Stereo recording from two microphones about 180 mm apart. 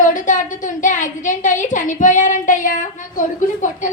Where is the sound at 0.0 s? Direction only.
45° left (ahead or behind).